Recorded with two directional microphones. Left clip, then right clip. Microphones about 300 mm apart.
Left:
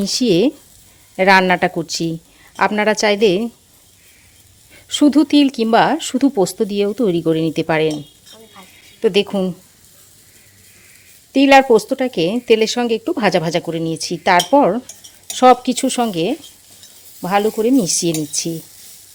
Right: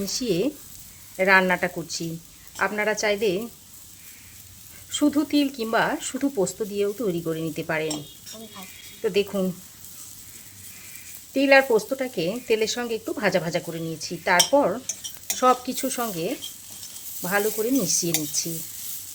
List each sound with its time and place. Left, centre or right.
0.0 s speech: left
4.9 s speech: left
9.0 s speech: left
11.3 s speech: left